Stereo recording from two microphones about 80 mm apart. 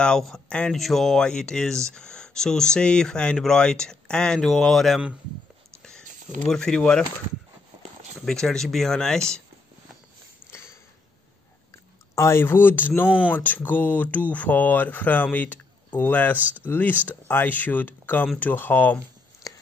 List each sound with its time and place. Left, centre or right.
0.0 s speech: centre
5.8 s whispering: centre
6.5 s speech: centre
8.3 s speech: centre
10.4 s a sound: left
11.7 s speech: left
16.3 s speech: right
16.6 s speech: left